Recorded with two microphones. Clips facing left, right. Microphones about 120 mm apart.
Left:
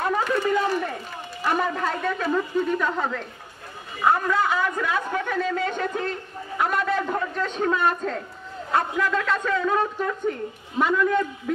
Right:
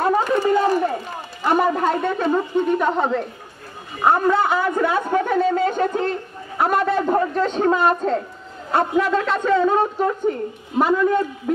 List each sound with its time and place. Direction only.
0.0 s run: 35° right (ahead or behind)
1.5 s a woman's voice: 30° right (ahead or behind)